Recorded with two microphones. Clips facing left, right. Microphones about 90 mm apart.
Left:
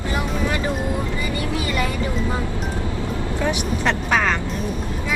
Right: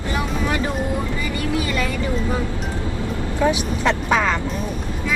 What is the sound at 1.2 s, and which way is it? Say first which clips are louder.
Speech: right 1 dB; 25° left (ahead or behind).